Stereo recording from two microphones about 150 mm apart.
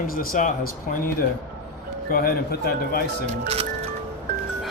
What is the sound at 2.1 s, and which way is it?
Speech, 75° left (ahead or behind).